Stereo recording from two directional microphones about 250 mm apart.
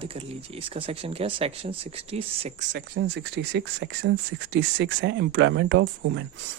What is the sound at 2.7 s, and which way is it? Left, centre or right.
Speech, right.